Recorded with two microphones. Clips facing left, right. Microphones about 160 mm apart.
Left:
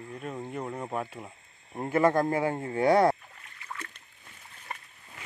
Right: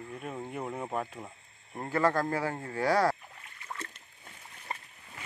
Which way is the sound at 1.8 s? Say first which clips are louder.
Left 4 dB; 20° left (ahead or behind).